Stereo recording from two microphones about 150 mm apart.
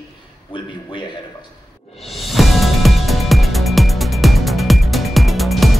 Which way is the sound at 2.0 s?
Centre (ahead or behind).